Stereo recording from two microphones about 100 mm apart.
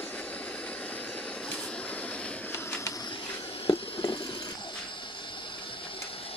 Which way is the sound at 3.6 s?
60° left (ahead or behind).